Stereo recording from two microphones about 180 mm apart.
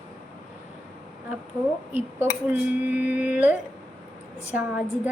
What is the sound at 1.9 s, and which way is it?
A woman's voice, 10° right (ahead or behind).